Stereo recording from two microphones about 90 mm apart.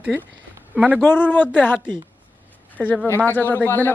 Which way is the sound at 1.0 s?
20° left (ahead or behind).